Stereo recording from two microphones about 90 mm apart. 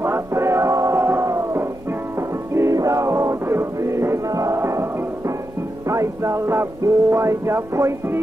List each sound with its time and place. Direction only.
0.0 s music: 30° right (ahead or behind)